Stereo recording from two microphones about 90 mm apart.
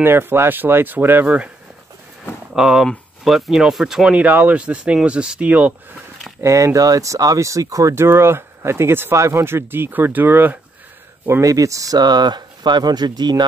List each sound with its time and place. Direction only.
0.0 s speech: 25° right (ahead or behind)
2.5 s speech: 5° right (ahead or behind)
6.4 s speech: 35° right (ahead or behind)
11.4 s speech: 40° right (ahead or behind)